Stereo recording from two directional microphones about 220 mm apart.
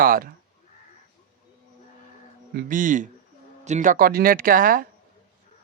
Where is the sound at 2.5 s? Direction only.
40° right (ahead or behind).